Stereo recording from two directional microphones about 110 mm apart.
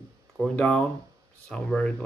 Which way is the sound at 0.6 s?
10° left (ahead or behind).